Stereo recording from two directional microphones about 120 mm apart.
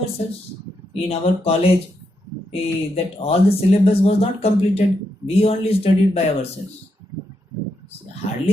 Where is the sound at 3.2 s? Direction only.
55° left (ahead or behind).